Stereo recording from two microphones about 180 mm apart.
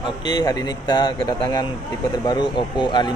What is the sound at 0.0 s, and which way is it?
Speech, 25° left (ahead or behind).